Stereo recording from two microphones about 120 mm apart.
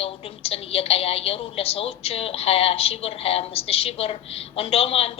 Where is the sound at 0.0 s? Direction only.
55° left (ahead or behind).